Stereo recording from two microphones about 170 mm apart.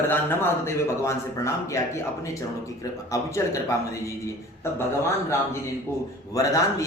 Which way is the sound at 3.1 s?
15° left (ahead or behind).